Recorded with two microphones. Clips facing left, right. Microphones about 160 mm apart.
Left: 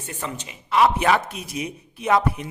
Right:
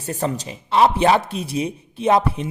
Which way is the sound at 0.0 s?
40° right (ahead or behind).